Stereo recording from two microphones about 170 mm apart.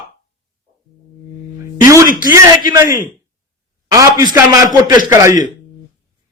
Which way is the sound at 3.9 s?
20° right (ahead or behind).